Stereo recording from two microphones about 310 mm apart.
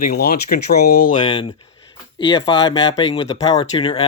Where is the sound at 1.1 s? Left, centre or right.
Centre.